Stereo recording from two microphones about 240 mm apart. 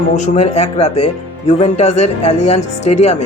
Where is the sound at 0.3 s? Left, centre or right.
Left.